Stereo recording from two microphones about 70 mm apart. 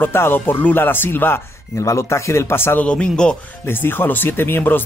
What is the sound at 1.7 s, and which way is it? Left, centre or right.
Speech, left.